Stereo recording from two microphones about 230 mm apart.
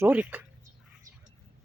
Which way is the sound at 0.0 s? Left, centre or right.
Centre.